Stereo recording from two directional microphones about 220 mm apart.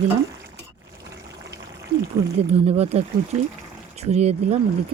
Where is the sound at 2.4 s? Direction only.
25° right (ahead or behind).